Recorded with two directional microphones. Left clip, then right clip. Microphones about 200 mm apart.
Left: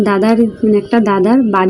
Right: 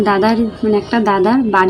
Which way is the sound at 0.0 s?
10° left (ahead or behind).